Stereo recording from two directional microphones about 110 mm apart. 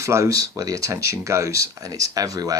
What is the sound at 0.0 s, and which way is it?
Speech, 30° right (ahead or behind).